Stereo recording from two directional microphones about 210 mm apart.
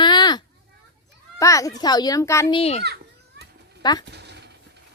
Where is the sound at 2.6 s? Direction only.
30° left (ahead or behind).